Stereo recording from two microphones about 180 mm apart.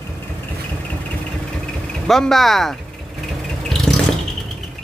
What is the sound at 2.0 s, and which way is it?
Speech, centre (ahead or behind).